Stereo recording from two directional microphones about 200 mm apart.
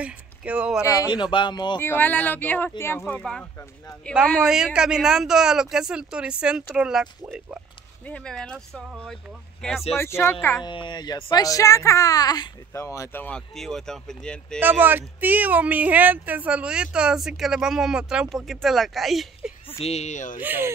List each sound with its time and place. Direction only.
0.0 s speech: 5° right (ahead or behind)
0.8 s speech: 20° left (ahead or behind)
1.8 s speech: 10° left (ahead or behind)
10.7 s speech: 25° left (ahead or behind); by 14.6 s 5° left (ahead or behind)
14.6 s speech: 10° right (ahead or behind)
19.8 s speech: 35° left (ahead or behind)
20.3 s speech: 10° right (ahead or behind)